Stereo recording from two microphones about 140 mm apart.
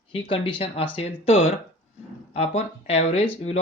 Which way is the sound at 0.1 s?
40° left (ahead or behind).